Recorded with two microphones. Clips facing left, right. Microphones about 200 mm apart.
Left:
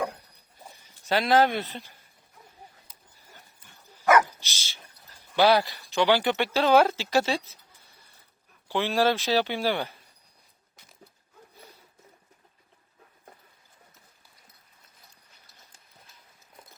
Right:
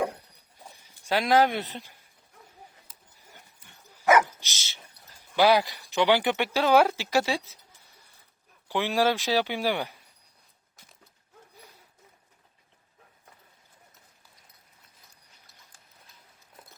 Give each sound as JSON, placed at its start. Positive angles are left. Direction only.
{"t": 1.0, "sound": "speech", "side_deg": -10}
{"t": 4.1, "sound": "dog", "side_deg": -20}
{"t": 5.3, "sound": "speech", "side_deg": -10}
{"t": 8.7, "sound": "speech", "side_deg": -15}